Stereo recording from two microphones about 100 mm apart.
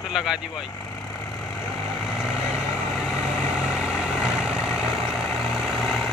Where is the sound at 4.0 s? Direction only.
5° right (ahead or behind).